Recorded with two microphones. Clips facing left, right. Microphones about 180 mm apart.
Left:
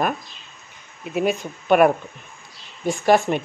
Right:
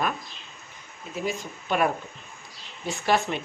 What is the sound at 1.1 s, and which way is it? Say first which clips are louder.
Speech: left 8 dB; 65° left (ahead or behind).